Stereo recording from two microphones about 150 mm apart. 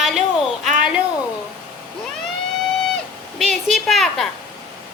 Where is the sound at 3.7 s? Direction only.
Centre (ahead or behind).